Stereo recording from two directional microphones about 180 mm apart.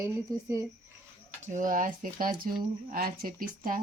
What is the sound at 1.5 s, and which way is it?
Speech, 50° right (ahead or behind).